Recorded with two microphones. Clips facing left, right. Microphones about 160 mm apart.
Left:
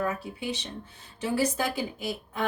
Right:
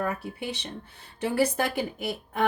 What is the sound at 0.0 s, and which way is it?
A woman's voice, 55° right (ahead or behind).